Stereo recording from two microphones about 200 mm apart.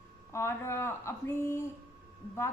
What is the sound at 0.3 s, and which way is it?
Speech, 15° left (ahead or behind).